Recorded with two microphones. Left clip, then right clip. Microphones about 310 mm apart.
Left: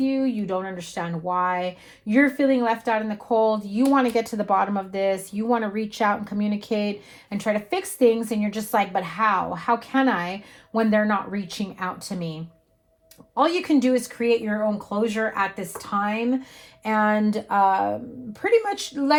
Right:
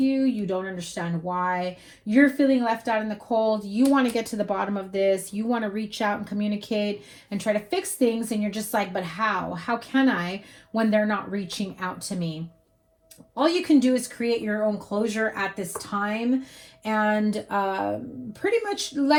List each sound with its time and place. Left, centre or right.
0.0 s speech: left
13.8 s speech: left